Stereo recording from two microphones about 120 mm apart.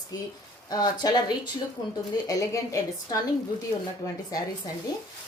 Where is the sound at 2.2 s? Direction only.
30° left (ahead or behind).